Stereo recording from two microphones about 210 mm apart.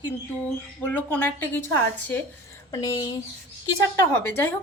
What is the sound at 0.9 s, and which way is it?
Speech, 10° left (ahead or behind).